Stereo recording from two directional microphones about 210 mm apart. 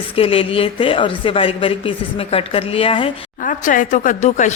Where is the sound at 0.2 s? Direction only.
25° left (ahead or behind).